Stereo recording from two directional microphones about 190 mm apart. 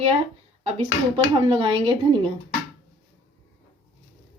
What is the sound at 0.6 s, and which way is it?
Speech, 35° right (ahead or behind).